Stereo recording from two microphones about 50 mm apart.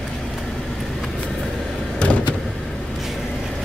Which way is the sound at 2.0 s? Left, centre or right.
Left.